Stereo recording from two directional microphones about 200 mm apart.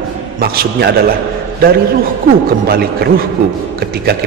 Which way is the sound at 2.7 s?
50° right (ahead or behind).